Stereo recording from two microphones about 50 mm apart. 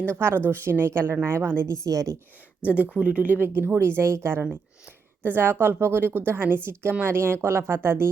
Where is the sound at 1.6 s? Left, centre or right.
Right.